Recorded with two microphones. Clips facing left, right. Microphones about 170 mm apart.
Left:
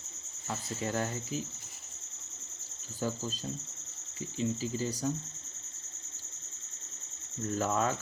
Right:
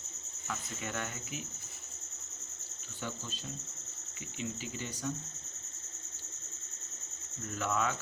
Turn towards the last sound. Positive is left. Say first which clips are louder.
# left 3 dB
turn(degrees=35)  # may be behind; listen again after turning